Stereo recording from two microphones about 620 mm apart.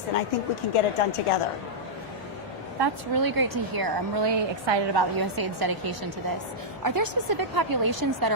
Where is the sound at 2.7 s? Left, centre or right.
Right.